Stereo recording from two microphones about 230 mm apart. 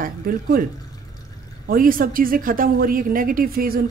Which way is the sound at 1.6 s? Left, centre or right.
Right.